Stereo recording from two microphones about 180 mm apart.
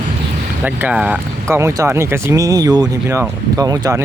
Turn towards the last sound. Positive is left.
turn(degrees=-20)  # may be behind; listen again after turning